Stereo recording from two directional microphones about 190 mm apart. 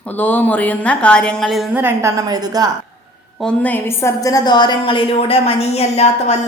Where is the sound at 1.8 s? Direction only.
15° right (ahead or behind).